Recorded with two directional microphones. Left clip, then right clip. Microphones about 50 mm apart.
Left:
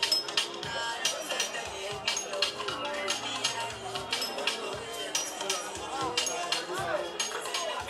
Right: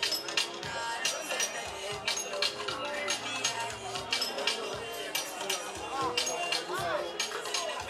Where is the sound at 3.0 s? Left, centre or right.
Centre.